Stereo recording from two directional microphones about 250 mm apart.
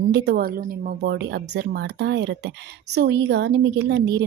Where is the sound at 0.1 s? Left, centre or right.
Right.